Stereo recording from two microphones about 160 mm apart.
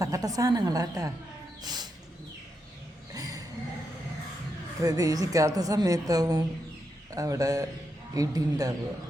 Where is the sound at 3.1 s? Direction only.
25° right (ahead or behind).